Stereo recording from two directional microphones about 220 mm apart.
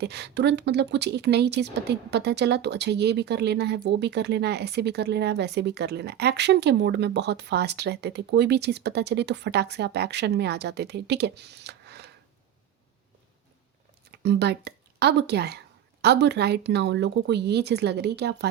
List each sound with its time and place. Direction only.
0.0 s speech: 50° right (ahead or behind)
14.1 s speech: 50° right (ahead or behind)